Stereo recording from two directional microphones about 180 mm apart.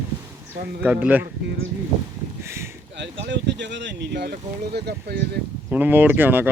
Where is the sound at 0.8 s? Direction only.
10° right (ahead or behind).